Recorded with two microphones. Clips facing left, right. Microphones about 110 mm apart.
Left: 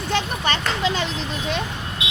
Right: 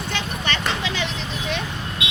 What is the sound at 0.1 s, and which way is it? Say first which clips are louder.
Vehicle: left 5 dB; 40° left (ahead or behind).